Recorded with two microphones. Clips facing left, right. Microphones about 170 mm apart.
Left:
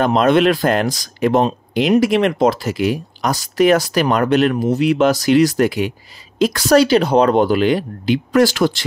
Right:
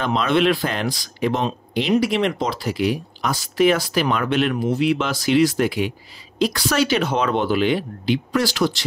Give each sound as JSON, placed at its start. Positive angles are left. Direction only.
{"t": 0.0, "sound": "speech", "side_deg": 45}